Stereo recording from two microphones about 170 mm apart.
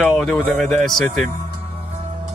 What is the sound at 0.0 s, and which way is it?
Speech, centre (ahead or behind).